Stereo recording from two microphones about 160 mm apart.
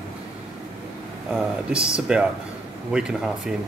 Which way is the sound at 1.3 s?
5° right (ahead or behind).